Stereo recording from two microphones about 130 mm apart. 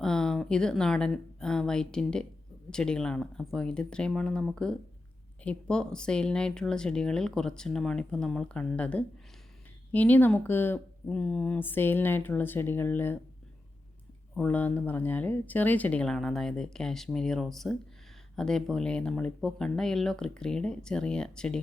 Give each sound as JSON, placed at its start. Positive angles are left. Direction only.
{"t": 0.0, "sound": "speech", "side_deg": 5}
{"t": 14.3, "sound": "speech", "side_deg": 10}